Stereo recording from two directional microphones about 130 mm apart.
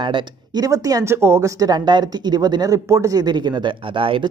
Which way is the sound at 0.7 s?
25° right (ahead or behind).